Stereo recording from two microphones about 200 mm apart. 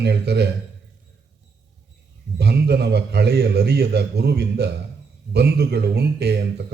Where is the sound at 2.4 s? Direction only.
55° right (ahead or behind).